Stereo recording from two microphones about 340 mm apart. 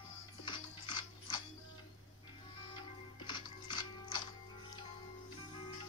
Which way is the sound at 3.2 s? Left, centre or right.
Centre.